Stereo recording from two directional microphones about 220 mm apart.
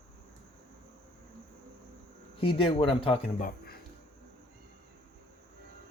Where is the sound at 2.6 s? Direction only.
25° left (ahead or behind).